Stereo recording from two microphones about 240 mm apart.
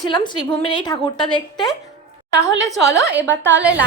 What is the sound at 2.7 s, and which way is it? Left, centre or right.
Speech, right.